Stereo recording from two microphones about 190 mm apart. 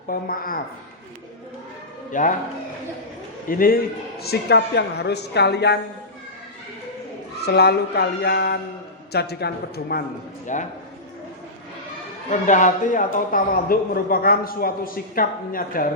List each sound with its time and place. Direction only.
0.1 s speech: 50° left (ahead or behind)
2.1 s speech: 40° left (ahead or behind)
3.5 s a man's voice: 50° left (ahead or behind)
7.3 s a man's voice: 60° left (ahead or behind)
10.4 s a man's voice: 40° left (ahead or behind)
12.3 s speech: 40° left (ahead or behind)